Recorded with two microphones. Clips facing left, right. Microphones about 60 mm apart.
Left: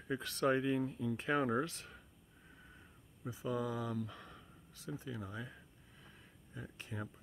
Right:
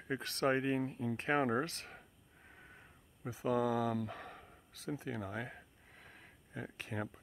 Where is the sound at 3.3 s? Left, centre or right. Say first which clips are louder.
Right 5 dB; right.